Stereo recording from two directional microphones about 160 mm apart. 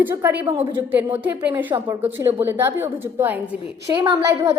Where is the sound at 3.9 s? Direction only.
25° right (ahead or behind).